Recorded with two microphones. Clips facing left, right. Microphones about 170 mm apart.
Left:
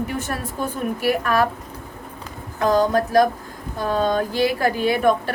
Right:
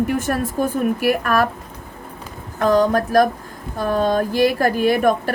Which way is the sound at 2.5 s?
50° right (ahead or behind).